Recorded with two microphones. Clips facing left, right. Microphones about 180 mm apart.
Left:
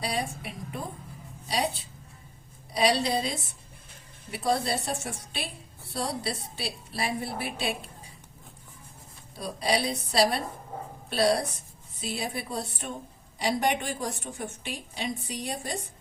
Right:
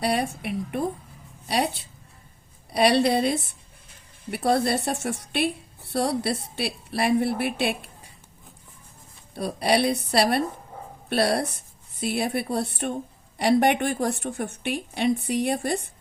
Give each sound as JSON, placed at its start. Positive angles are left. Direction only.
{"t": 0.0, "sound": "a woman's voice", "side_deg": -65}
{"t": 9.3, "sound": "a woman's voice", "side_deg": -65}